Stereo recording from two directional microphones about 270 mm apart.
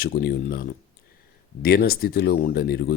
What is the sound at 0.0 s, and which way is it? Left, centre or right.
Speech, left.